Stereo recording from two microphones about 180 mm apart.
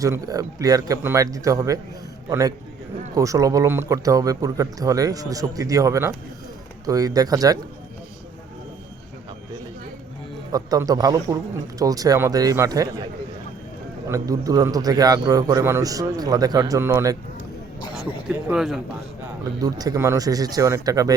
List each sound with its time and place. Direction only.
0.0 s a man's voice: 20° right (ahead or behind)
3.2 s a man's voice: 20° right (ahead or behind)
10.5 s a man's voice: 20° right (ahead or behind)
14.1 s a man's voice: 20° right (ahead or behind)
17.9 s speech: 5° right (ahead or behind)
19.6 s a man's voice: 20° right (ahead or behind)